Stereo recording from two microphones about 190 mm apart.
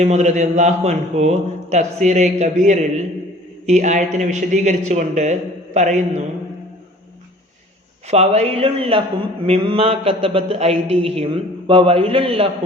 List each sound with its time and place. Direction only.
0.0 s a man's voice: 35° right (ahead or behind)
8.0 s a man's voice: 35° right (ahead or behind)